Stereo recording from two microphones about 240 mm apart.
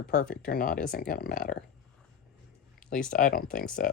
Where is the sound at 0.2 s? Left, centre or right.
Left.